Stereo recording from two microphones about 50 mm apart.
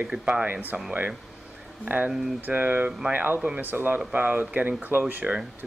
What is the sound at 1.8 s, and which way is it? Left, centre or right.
Speech, right.